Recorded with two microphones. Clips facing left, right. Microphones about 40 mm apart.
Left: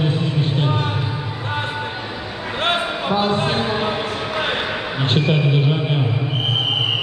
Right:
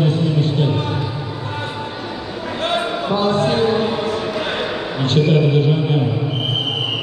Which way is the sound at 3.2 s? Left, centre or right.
Centre.